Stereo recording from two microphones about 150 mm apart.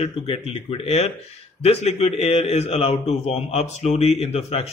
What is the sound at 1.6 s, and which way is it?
A man's voice, 45° left (ahead or behind).